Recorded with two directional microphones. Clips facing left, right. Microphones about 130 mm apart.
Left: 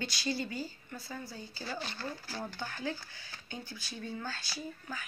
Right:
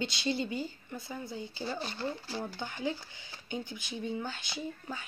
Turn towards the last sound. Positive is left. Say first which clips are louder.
# right 3 dB
turn(degrees=-20)  # may be behind; listen again after turning